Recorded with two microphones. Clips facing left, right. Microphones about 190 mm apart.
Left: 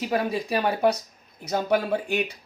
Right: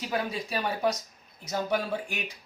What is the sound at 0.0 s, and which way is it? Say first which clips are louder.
Speech: left 6 dB; 60° left (ahead or behind).